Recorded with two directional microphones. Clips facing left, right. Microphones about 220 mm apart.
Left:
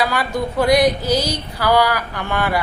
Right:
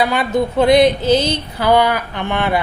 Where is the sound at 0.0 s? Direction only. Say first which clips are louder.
Right 4 dB; 20° right (ahead or behind).